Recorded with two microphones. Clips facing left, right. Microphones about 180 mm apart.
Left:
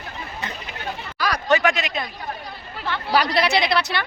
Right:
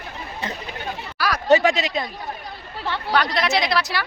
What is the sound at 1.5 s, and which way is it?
Speech, 35° right (ahead or behind).